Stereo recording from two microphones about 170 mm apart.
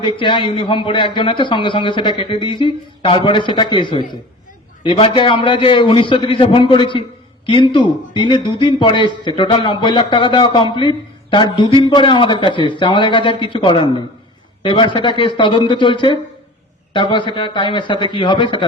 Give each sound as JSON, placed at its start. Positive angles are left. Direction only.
{"t": 0.2, "sound": "a man's voice", "side_deg": 30}